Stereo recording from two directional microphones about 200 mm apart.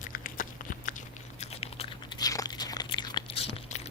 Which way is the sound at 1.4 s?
30° left (ahead or behind).